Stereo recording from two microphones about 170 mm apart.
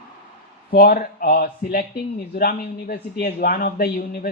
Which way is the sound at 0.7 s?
60° left (ahead or behind).